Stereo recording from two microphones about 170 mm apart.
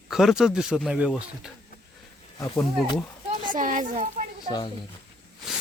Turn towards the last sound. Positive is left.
turn(degrees=25)  # may be behind; listen again after turning